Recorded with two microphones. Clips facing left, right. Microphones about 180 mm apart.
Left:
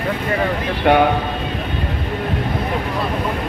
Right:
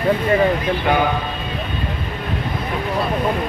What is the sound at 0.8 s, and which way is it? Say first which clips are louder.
Speech: left 6 dB; 65° left (ahead or behind).